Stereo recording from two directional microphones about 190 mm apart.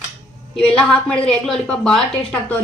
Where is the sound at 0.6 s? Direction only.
5° left (ahead or behind).